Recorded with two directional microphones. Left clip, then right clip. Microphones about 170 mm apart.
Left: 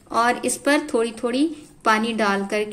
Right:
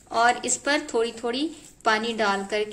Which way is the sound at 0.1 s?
15° left (ahead or behind).